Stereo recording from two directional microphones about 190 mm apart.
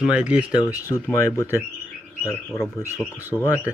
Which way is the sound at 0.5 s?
15° left (ahead or behind).